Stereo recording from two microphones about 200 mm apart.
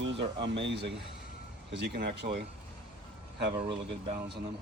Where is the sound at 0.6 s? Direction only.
60° right (ahead or behind).